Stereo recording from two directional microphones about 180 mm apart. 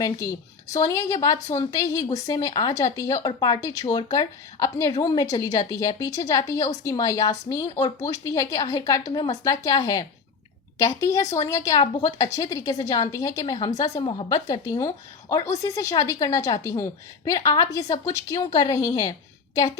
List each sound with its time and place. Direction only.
0.0 s a woman's voice: 20° left (ahead or behind)